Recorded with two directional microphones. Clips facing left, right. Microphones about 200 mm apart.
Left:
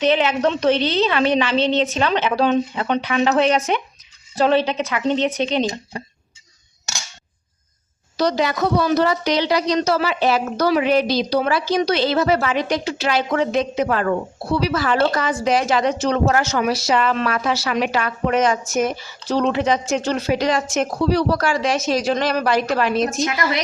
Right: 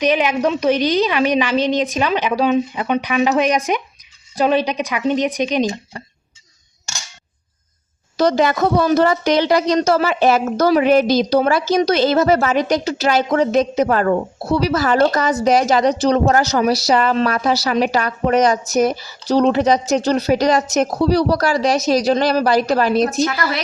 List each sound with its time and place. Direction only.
0.0 s a woman's voice: 15° right (ahead or behind)
8.1 s a woman's voice: 50° right (ahead or behind)